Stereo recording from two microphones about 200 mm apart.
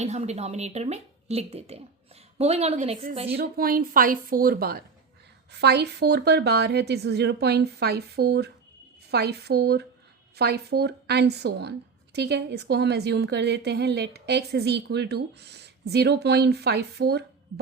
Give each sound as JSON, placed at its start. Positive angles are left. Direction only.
{"t": 0.0, "sound": "speech", "side_deg": -35}
{"t": 3.3, "sound": "a woman's voice", "side_deg": -50}